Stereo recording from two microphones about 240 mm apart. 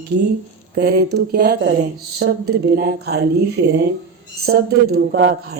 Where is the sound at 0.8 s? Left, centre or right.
Right.